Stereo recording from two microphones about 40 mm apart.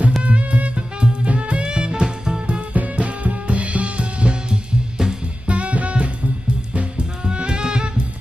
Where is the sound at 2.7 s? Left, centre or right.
Right.